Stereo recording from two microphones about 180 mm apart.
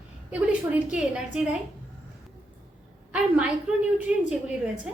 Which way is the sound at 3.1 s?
5° right (ahead or behind).